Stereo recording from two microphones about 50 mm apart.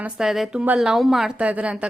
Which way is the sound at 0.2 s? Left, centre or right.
Centre.